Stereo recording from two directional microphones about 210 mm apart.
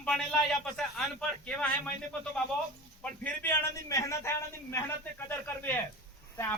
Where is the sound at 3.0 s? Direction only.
10° left (ahead or behind).